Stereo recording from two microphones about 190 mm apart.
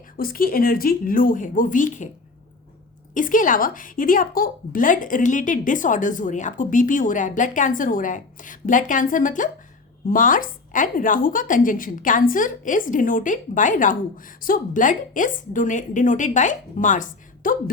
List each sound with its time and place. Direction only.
0.2 s a woman's voice: 50° left (ahead or behind)
3.2 s a woman's voice: 45° left (ahead or behind)